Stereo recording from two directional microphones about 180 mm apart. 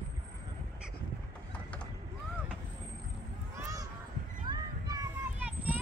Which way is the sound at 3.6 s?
15° right (ahead or behind).